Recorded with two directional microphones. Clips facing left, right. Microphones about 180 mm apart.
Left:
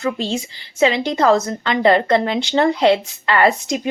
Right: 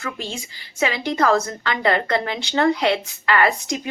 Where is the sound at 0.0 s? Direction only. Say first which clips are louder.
Left 9 dB; 25° left (ahead or behind).